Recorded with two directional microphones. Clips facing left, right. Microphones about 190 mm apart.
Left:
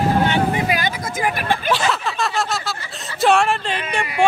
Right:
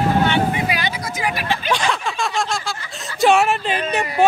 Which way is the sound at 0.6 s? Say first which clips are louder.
Left 2 dB; 45° left (ahead or behind).